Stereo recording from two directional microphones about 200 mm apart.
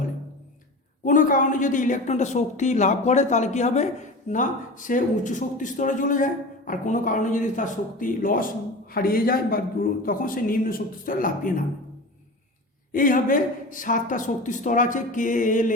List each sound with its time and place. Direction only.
1.0 s a man's voice: 40° left (ahead or behind)
12.9 s a man's voice: 40° left (ahead or behind)